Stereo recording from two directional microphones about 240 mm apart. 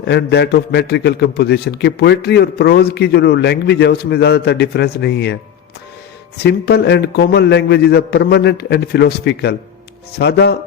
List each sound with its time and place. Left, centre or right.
0.0 s a man's voice: left